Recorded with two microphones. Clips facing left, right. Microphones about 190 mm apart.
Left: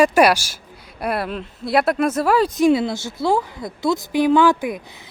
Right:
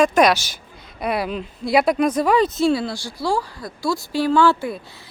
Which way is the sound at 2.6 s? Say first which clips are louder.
Left 3 dB; 20° left (ahead or behind).